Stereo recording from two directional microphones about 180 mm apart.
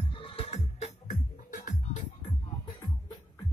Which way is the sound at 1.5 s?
45° left (ahead or behind).